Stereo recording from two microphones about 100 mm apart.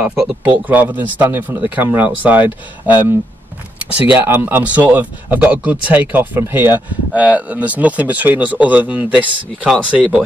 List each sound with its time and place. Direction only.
0.7 s speech: 15° right (ahead or behind)